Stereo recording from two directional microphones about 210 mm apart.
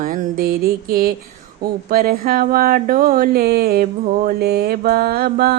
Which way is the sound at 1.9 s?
45° right (ahead or behind).